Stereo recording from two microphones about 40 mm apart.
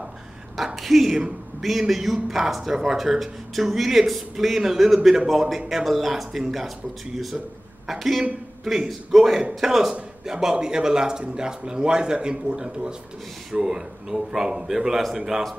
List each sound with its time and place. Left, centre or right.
0.7 s a man's voice: centre
7.8 s a man's voice: centre